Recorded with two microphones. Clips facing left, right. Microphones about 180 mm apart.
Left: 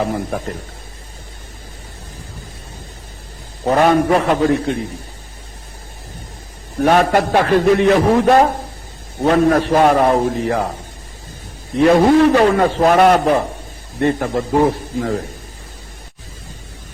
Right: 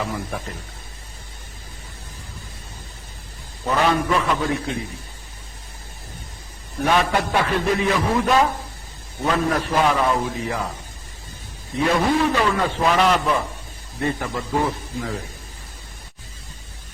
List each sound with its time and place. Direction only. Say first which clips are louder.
0.0 s a man's voice: left 7 dB; 50° left (ahead or behind)
0.3 s speech: left 7 dB; 35° left (ahead or behind)
3.6 s a man's voice: left 7 dB; 50° left (ahead or behind)
6.8 s a man's voice: left 7 dB; 45° left (ahead or behind)
9.6 s a man's voice: left 7 dB; 60° left (ahead or behind)
11.9 s a man's voice: left 9 dB; 60° left (ahead or behind)